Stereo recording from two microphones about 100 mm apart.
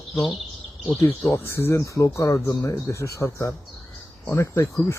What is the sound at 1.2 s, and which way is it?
Speech, 20° left (ahead or behind).